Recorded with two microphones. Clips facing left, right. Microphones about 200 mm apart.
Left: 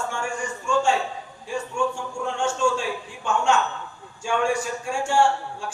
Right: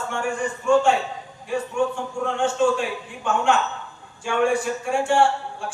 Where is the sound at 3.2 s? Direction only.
60° right (ahead or behind).